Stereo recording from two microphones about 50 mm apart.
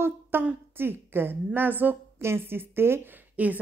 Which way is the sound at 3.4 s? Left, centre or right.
Right.